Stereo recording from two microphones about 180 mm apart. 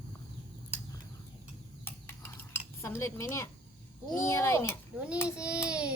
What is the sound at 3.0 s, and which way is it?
A woman's voice, 15° left (ahead or behind).